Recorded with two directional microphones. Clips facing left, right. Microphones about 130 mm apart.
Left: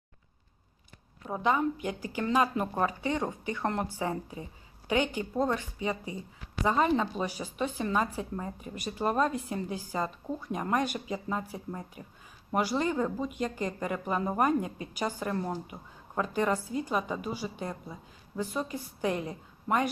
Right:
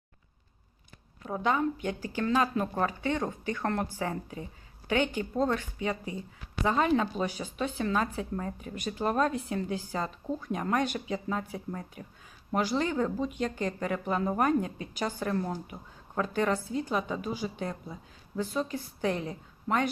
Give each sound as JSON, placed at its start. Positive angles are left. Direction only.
{"t": 1.3, "sound": "speech", "side_deg": 5}
{"t": 6.7, "sound": "a woman's voice", "side_deg": 5}
{"t": 12.0, "sound": "speech", "side_deg": 25}
{"t": 12.5, "sound": "a woman's voice", "side_deg": 5}